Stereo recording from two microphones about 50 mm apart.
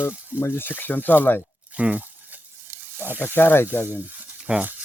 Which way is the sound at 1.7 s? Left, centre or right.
Right.